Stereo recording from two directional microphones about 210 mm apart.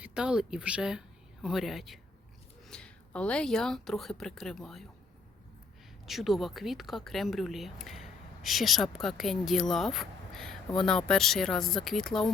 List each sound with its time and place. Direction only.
0.0 s speech: 5° right (ahead or behind)
6.1 s speech: centre (ahead or behind)